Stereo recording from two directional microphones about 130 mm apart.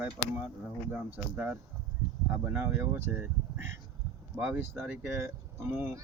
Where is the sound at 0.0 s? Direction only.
15° right (ahead or behind).